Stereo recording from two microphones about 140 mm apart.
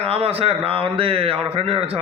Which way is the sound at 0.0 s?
45° right (ahead or behind).